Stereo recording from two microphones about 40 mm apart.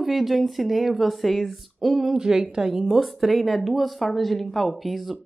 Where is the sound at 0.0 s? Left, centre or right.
Centre.